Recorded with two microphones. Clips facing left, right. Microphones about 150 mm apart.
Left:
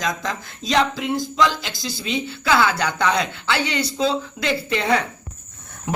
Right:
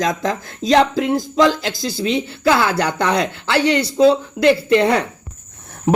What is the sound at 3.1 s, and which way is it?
A man's voice, 65° right (ahead or behind).